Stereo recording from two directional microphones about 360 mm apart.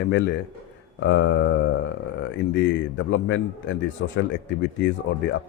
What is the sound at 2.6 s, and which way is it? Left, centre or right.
A man's voice, left.